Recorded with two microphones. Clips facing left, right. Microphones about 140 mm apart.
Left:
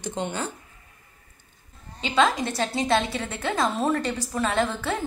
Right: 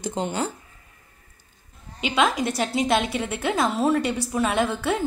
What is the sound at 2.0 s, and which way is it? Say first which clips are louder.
A woman's voice: even; 10° right (ahead or behind).